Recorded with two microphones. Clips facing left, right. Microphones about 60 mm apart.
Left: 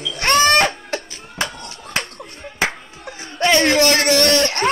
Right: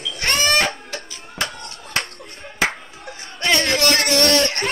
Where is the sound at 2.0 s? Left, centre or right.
Centre.